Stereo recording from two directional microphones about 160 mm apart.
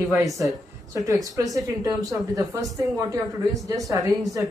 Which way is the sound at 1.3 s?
20° right (ahead or behind).